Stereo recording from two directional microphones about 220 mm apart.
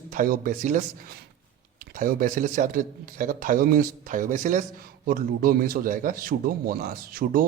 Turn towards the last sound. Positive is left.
turn(degrees=-40)  # may be behind; listen again after turning